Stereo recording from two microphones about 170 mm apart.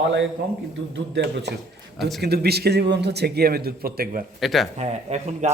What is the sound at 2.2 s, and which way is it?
A man's voice, 70° right (ahead or behind).